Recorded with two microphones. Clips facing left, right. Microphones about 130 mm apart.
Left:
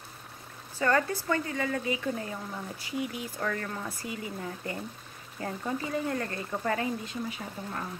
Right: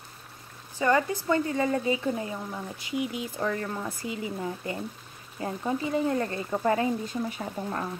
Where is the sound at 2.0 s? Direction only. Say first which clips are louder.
Right 3 dB; 20° right (ahead or behind).